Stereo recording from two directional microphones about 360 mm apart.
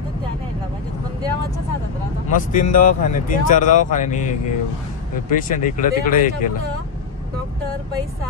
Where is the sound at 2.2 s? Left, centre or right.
Left.